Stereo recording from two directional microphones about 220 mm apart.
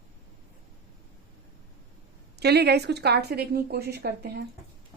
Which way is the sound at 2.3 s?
50° right (ahead or behind).